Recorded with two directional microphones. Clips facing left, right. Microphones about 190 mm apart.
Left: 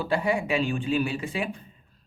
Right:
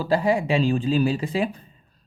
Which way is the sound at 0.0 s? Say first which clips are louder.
Right 4 dB; 35° right (ahead or behind).